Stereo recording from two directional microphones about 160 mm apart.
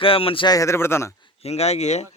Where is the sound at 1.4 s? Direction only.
40° left (ahead or behind).